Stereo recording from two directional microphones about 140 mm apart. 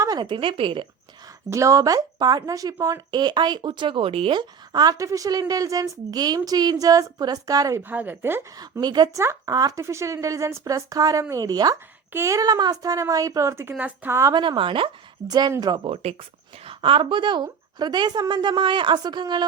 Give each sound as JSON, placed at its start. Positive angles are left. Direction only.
{"t": 0.0, "sound": "a woman's voice", "side_deg": -30}
{"t": 1.5, "sound": "speech", "side_deg": -20}
{"t": 7.8, "sound": "speech", "side_deg": -15}
{"t": 8.5, "sound": "speech", "side_deg": -30}
{"t": 14.3, "sound": "a woman's voice", "side_deg": -35}